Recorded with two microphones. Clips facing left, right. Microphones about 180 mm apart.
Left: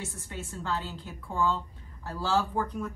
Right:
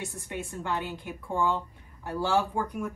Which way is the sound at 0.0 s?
15° right (ahead or behind).